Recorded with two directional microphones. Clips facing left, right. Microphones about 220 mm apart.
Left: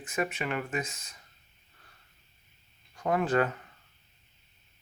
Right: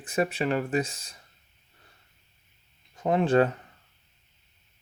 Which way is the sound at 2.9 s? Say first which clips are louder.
Right 5 dB; 25° right (ahead or behind).